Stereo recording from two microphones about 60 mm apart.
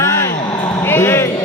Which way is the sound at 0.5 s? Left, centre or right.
Left.